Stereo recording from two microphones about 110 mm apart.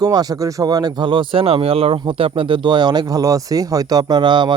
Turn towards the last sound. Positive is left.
turn(degrees=-45)  # may be behind; listen again after turning